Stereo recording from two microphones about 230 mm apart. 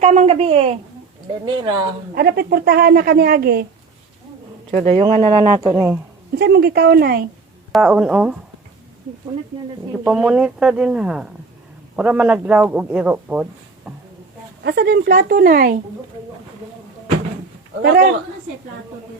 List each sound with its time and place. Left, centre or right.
0.0 s speech: right
2.1 s a woman's voice: right
4.7 s speech: right
6.4 s speech: right
7.7 s speech: centre
10.0 s a man's voice: centre
14.6 s a woman's voice: right
17.8 s speech: right